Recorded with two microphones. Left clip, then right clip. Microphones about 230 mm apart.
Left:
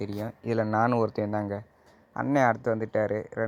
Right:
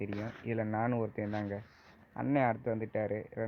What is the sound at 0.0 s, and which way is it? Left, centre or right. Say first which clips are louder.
Speech: left 6 dB; left.